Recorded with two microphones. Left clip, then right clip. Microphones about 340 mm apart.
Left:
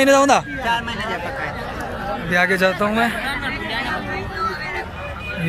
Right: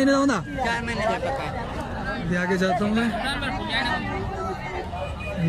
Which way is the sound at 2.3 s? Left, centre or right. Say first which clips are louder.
Left 9 dB; centre.